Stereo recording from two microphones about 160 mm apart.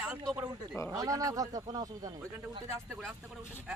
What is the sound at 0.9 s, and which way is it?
Speech, 20° right (ahead or behind).